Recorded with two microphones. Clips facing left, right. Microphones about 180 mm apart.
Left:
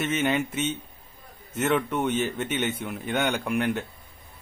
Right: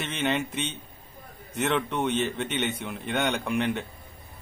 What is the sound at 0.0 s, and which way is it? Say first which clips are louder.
A man's voice: left 3 dB; 5° left (ahead or behind).